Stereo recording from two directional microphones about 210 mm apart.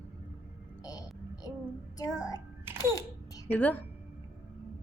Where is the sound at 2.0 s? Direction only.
15° left (ahead or behind).